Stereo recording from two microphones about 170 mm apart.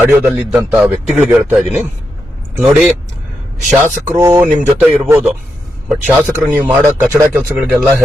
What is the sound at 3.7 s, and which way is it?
Speech, 15° right (ahead or behind).